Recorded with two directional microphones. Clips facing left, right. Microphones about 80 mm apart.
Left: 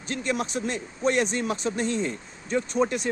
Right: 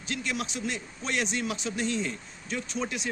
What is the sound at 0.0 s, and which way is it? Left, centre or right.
A man's voice, left.